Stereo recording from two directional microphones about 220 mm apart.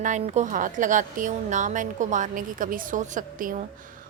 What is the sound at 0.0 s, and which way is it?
A woman's voice, 30° right (ahead or behind).